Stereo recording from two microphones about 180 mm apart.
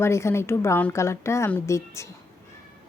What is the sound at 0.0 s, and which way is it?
A woman's voice, 15° left (ahead or behind).